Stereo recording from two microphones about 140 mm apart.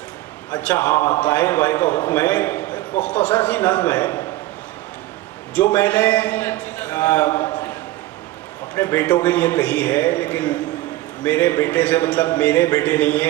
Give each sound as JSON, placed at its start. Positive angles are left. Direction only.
{"t": 0.6, "sound": "a man's voice", "side_deg": 15}
{"t": 5.5, "sound": "a man's voice", "side_deg": 15}
{"t": 8.7, "sound": "a man's voice", "side_deg": 20}